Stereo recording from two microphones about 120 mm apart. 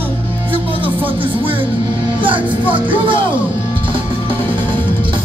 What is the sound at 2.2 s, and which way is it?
Speech, 45° right (ahead or behind).